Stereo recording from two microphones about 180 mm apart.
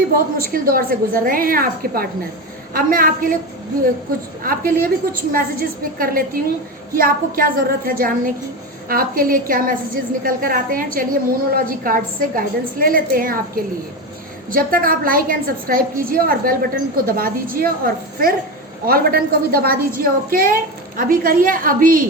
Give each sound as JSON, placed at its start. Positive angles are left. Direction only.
{"t": 0.3, "sound": "a woman's voice", "side_deg": -55}
{"t": 4.4, "sound": "a woman's voice", "side_deg": -55}
{"t": 14.5, "sound": "a woman's voice", "side_deg": -55}